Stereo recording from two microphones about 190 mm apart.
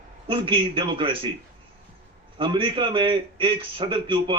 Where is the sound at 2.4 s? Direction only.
25° right (ahead or behind).